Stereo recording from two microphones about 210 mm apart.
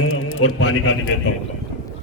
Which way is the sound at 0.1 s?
75° left (ahead or behind).